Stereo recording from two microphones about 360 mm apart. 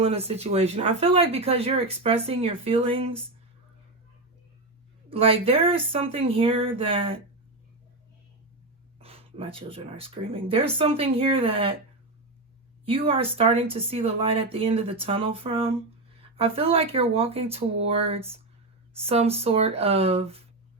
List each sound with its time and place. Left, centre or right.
0.0 s speech: centre
5.0 s speech: centre
9.0 s speech: centre
12.8 s speech: centre